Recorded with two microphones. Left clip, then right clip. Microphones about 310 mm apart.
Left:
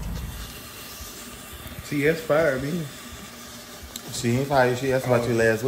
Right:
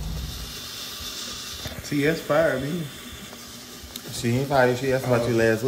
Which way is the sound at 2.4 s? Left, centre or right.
Centre.